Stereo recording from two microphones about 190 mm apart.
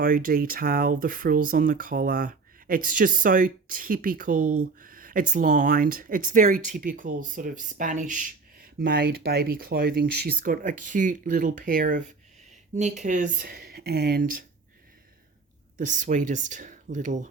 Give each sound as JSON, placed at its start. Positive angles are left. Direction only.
{"t": 0.0, "sound": "speech", "side_deg": -50}
{"t": 15.8, "sound": "speech", "side_deg": -40}